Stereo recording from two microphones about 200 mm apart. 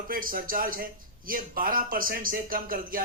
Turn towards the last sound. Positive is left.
turn(degrees=-45)  # may be behind; listen again after turning